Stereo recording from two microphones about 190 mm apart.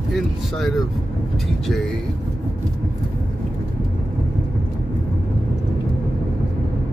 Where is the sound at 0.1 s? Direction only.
Centre (ahead or behind).